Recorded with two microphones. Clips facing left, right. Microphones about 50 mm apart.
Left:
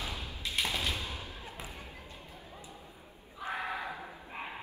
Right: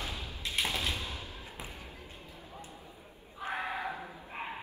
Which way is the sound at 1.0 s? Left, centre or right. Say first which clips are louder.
Even; left.